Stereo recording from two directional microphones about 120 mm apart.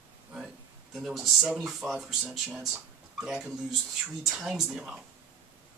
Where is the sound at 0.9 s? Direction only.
Centre (ahead or behind).